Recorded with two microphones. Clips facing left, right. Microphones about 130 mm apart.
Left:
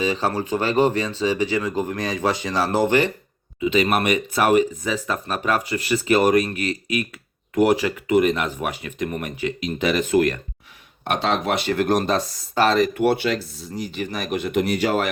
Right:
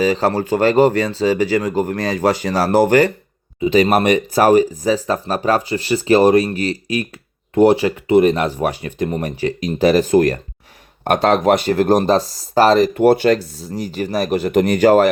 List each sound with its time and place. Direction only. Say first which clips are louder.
0.3 s speech: right 7 dB; 40° right (ahead or behind)
11.0 s speech: right 8 dB; 50° right (ahead or behind)